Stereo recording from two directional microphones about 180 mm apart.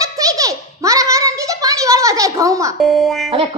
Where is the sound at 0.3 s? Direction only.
20° right (ahead or behind).